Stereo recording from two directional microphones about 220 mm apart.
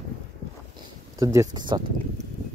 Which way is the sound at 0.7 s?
15° right (ahead or behind).